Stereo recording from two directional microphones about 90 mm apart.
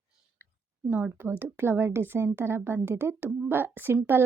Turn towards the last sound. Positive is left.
turn(degrees=-25)  # may be behind; listen again after turning